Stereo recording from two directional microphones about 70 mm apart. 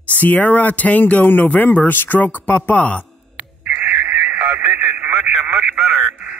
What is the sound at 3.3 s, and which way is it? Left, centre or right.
Radio, right.